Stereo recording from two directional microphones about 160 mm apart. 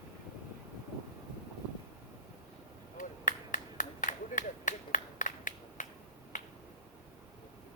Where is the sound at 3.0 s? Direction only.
55° left (ahead or behind).